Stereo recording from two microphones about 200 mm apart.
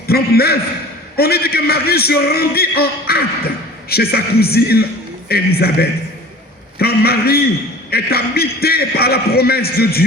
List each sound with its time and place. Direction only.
0.1 s a man's voice: 50° left (ahead or behind)